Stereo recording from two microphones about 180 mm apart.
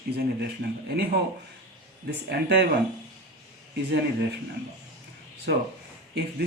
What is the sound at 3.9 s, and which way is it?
Speech, 70° right (ahead or behind).